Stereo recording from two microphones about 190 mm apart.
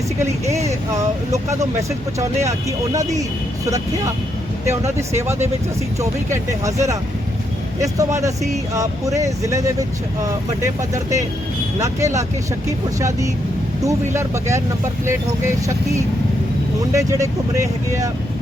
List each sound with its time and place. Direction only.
0.2 s speech: 15° right (ahead or behind)
2.1 s speech: 15° right (ahead or behind)
4.6 s speech: 15° right (ahead or behind)
16.9 s speech: 15° right (ahead or behind)